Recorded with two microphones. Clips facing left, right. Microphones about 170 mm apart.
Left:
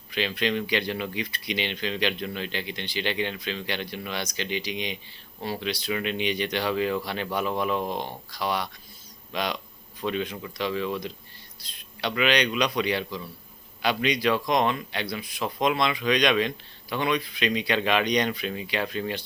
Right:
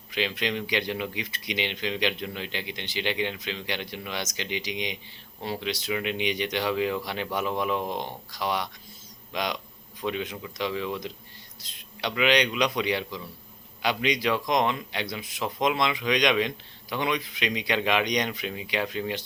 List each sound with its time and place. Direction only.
0.1 s speech: 15° right (ahead or behind)